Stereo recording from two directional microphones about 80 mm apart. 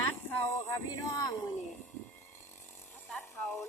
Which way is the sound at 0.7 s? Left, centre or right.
Left.